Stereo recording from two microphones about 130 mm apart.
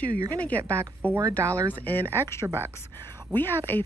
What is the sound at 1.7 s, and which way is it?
Speech, 15° left (ahead or behind).